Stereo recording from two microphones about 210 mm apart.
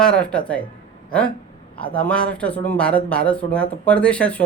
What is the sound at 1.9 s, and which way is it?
Speech, 5° left (ahead or behind).